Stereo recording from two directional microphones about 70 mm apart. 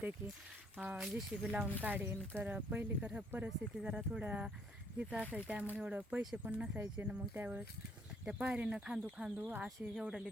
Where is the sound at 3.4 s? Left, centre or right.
Centre.